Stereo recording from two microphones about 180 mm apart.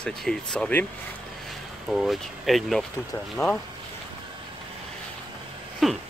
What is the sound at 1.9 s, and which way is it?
Speech, centre (ahead or behind).